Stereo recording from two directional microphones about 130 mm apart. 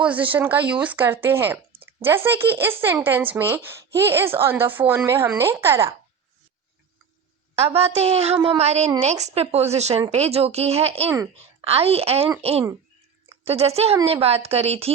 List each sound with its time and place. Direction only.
0.0 s speech: 10° right (ahead or behind)
7.5 s a woman's voice: 50° right (ahead or behind)